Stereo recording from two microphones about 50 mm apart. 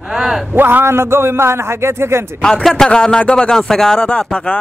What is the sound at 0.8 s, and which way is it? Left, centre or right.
A man's voice, right.